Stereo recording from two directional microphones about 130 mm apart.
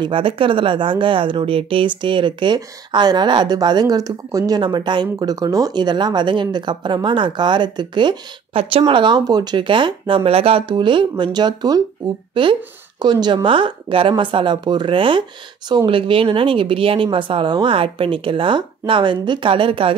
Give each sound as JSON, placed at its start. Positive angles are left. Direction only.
{"t": 0.0, "sound": "speech", "side_deg": -40}